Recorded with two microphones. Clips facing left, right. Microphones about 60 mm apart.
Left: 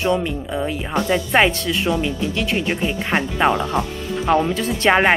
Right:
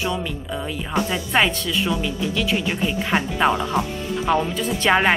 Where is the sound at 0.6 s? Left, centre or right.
Left; by 3.5 s centre.